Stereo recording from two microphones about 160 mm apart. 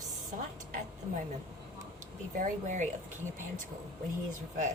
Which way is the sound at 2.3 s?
55° right (ahead or behind).